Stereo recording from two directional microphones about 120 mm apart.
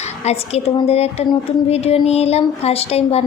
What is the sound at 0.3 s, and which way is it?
A woman's voice, 65° left (ahead or behind).